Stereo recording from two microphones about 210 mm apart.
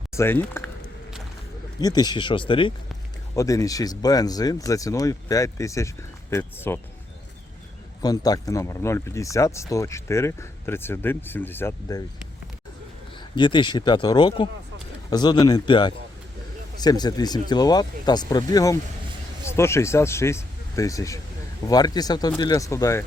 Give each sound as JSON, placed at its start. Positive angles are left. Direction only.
{"t": 0.2, "sound": "speech", "side_deg": 10}
{"t": 1.8, "sound": "speech", "side_deg": 20}
{"t": 8.0, "sound": "speech", "side_deg": 15}
{"t": 13.3, "sound": "speech", "side_deg": 20}